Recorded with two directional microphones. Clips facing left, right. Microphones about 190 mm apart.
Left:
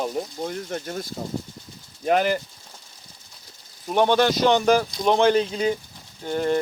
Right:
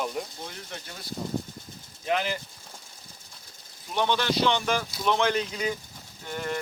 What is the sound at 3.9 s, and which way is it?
Speech, 50° left (ahead or behind).